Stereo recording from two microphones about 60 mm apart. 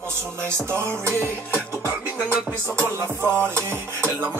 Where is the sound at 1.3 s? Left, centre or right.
Right.